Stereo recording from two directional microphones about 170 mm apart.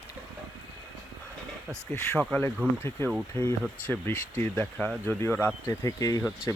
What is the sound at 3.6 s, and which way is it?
Speech, 10° left (ahead or behind).